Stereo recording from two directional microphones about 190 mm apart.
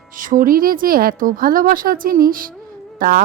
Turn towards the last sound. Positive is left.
turn(degrees=-50)  # may be behind; listen again after turning